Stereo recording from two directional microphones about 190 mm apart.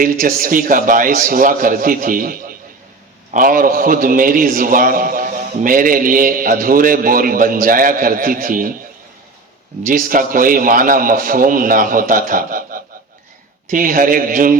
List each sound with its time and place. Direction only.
0.0 s a man's voice: 50° right (ahead or behind)
9.8 s a man's voice: 50° right (ahead or behind)